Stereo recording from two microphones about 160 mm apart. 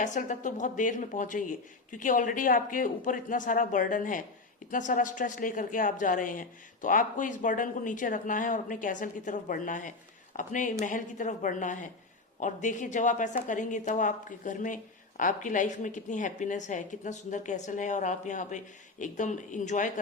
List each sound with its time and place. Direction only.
0.0 s speech: 50° left (ahead or behind)